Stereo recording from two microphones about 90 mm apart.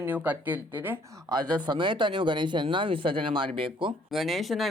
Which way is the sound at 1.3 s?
55° right (ahead or behind).